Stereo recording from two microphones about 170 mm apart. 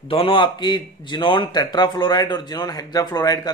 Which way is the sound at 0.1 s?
30° left (ahead or behind).